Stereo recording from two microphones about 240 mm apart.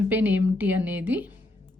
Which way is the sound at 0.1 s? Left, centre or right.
Centre.